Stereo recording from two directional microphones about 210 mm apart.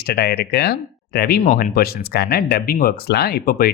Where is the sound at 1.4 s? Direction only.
40° left (ahead or behind).